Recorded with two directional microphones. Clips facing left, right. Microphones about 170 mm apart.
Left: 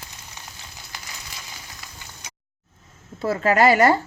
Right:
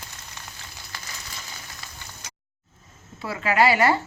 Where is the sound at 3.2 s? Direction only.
45° left (ahead or behind).